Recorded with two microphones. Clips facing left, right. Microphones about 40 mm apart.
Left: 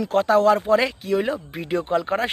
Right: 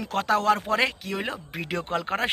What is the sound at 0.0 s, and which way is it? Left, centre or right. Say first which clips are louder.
Speech: left 6 dB; right.